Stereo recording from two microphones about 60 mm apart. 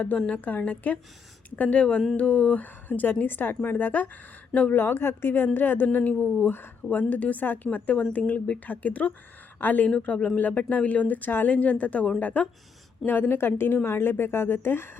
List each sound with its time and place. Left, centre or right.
0.3 s speech: left